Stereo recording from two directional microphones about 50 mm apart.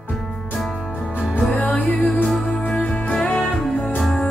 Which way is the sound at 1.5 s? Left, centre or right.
Left.